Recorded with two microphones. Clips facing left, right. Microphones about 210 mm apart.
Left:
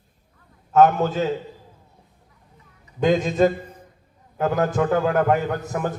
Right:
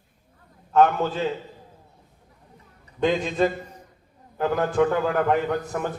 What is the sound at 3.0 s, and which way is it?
Speech, 45° left (ahead or behind).